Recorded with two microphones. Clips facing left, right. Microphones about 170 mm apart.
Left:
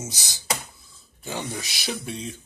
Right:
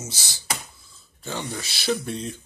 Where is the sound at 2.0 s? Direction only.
5° left (ahead or behind).